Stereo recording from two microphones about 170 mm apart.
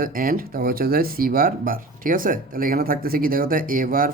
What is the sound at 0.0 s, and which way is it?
Speech, 55° right (ahead or behind).